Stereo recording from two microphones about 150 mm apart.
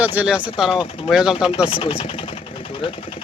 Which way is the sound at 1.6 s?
40° left (ahead or behind).